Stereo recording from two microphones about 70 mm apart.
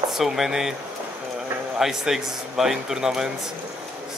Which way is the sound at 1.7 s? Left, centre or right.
Centre.